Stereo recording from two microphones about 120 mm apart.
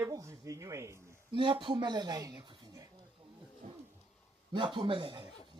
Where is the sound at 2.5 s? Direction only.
30° right (ahead or behind).